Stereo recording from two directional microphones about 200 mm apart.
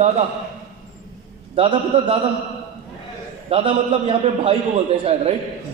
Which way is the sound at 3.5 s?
25° right (ahead or behind).